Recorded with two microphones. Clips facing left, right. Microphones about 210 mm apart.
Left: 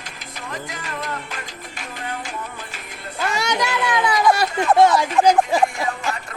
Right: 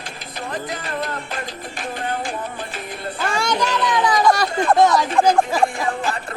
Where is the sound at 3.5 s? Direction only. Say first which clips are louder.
Right 2 dB; 10° left (ahead or behind).